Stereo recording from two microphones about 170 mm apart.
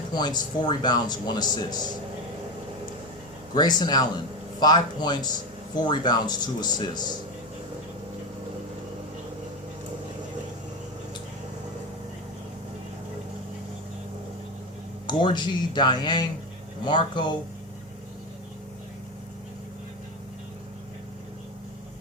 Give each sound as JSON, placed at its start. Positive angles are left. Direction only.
{"t": 0.1, "sound": "speech", "side_deg": 25}
{"t": 3.5, "sound": "speech", "side_deg": 25}
{"t": 15.0, "sound": "speech", "side_deg": 25}